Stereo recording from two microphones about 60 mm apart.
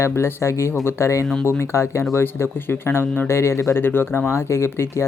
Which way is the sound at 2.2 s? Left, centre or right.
Left.